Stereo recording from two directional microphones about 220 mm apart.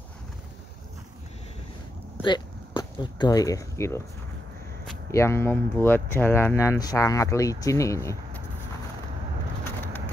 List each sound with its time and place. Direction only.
2.2 s speech: 20° left (ahead or behind)
5.1 s speech: 10° left (ahead or behind)